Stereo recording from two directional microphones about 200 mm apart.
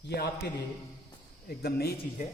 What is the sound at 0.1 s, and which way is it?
A man's voice, 55° left (ahead or behind).